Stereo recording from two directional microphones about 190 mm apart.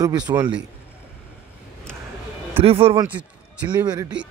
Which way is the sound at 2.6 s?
30° right (ahead or behind).